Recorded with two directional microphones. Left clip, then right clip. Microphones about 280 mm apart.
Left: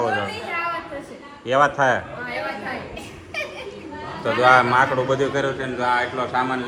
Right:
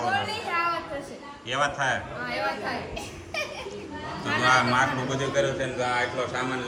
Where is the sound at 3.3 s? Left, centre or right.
Right.